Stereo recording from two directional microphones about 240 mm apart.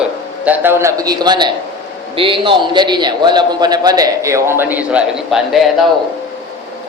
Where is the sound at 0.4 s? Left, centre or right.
Centre.